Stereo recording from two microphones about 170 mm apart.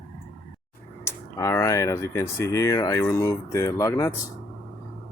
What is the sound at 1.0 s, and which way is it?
Speech, 15° left (ahead or behind).